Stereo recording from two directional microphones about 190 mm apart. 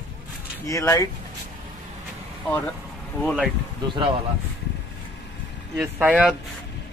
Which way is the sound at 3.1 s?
Centre (ahead or behind).